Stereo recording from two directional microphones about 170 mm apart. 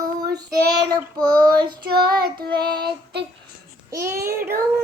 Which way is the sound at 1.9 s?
65° right (ahead or behind).